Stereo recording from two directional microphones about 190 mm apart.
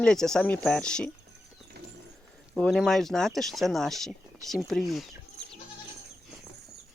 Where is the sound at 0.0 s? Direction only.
5° left (ahead or behind).